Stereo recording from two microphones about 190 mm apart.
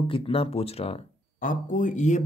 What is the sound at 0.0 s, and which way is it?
Speech, 30° left (ahead or behind).